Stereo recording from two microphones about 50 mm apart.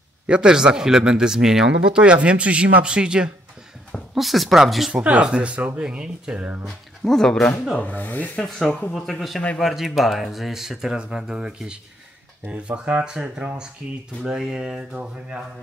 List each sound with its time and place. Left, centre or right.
0.3 s speech: centre
4.1 s speech: centre
4.9 s speech: right
6.6 s speech: centre
7.8 s speech: left
8.5 s speech: centre